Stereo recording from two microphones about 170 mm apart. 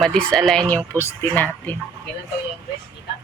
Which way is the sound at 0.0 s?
5° left (ahead or behind).